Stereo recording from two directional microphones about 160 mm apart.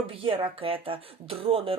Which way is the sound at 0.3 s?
35° right (ahead or behind).